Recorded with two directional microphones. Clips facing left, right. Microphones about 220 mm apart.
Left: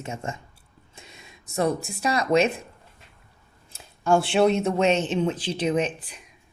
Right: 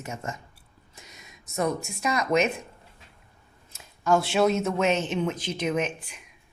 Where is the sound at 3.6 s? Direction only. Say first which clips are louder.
Left 2 dB; 30° left (ahead or behind).